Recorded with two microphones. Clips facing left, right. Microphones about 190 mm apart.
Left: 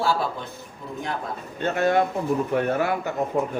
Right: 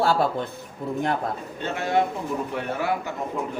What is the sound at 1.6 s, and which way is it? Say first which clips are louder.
Speech: left 3 dB; 50° left (ahead or behind).